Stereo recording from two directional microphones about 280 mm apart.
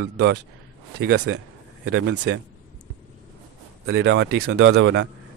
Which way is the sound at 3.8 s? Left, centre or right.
Right.